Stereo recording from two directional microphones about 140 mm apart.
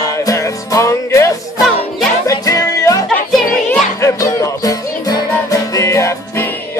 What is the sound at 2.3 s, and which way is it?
Music, 25° left (ahead or behind).